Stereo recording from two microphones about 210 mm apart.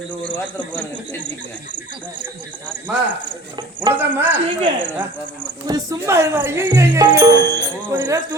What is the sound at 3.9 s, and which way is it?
Speech, 10° right (ahead or behind).